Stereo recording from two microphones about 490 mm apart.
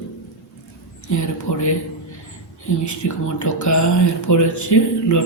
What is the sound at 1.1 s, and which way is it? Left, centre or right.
Speech, left.